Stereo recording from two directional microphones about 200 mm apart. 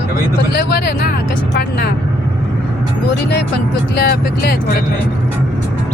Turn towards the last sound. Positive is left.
turn(degrees=50)  # may be behind; listen again after turning